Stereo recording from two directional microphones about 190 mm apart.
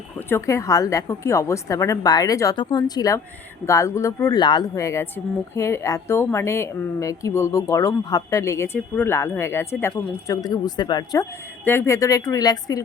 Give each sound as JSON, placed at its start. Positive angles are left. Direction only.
{"t": 0.3, "sound": "a woman's voice", "side_deg": 15}